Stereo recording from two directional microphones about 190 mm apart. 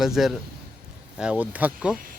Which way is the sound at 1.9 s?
45° right (ahead or behind).